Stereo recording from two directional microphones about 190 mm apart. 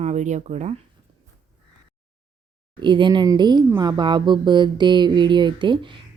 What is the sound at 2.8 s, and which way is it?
Speech, 25° right (ahead or behind).